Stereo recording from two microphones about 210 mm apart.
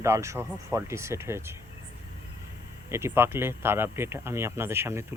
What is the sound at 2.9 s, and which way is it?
Speech, 10° right (ahead or behind).